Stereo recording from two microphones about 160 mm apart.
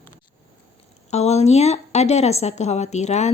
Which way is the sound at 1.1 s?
45° left (ahead or behind).